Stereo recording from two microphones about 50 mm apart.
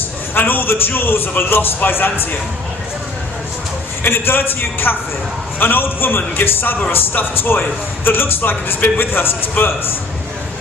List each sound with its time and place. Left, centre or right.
0.3 s a man's voice: left
4.0 s a man's voice: left